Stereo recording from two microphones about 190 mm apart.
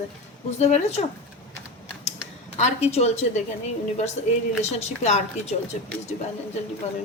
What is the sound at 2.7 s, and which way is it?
A woman's voice, 35° left (ahead or behind).